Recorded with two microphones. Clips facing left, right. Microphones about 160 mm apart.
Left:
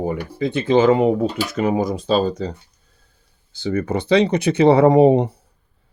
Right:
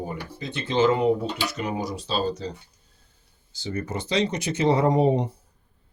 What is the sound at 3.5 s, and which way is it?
Speech, 60° left (ahead or behind).